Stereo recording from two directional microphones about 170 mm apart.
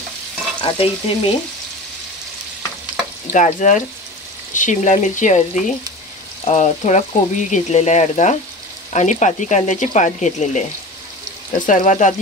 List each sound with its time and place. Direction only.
0.6 s stir: 35° left (ahead or behind)
3.3 s speech: 45° left (ahead or behind)